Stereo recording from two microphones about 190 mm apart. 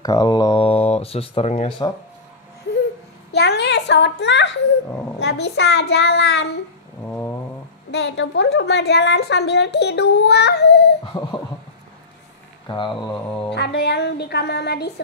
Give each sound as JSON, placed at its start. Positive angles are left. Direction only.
{"t": 0.0, "sound": "speech", "side_deg": 20}
{"t": 3.3, "sound": "a sound", "side_deg": 60}
{"t": 5.2, "sound": "a woman's voice", "side_deg": 60}
{"t": 7.1, "sound": "a sound", "side_deg": 10}
{"t": 7.9, "sound": "a woman's voice", "side_deg": 65}
{"t": 12.6, "sound": "mantra", "side_deg": 25}
{"t": 13.6, "sound": "a woman's voice", "side_deg": 60}